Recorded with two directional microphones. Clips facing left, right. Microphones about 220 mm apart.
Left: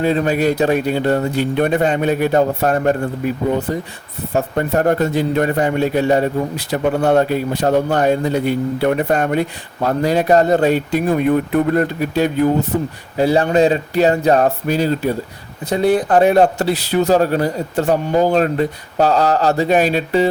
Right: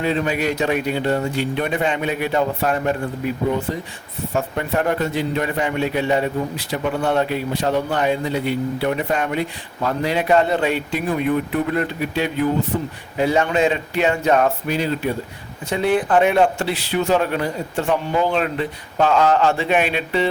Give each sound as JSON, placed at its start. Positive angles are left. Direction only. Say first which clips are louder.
{"t": 0.0, "sound": "speech", "louder": "left 5 dB", "side_deg": 40}
{"t": 4.4, "sound": "a man's voice", "louder": "left 5 dB", "side_deg": 40}